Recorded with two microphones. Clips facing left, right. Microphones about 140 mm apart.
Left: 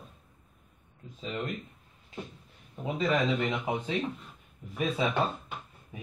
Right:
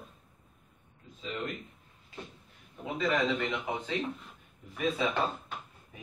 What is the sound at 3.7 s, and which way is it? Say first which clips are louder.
Speech: left 3 dB; 15° left (ahead or behind).